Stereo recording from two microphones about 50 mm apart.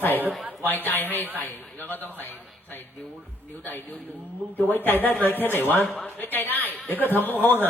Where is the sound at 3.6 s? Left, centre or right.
Left.